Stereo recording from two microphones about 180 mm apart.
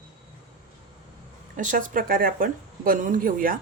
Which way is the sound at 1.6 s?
45° right (ahead or behind).